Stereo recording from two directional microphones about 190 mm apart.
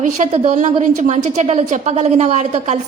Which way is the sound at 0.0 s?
40° right (ahead or behind).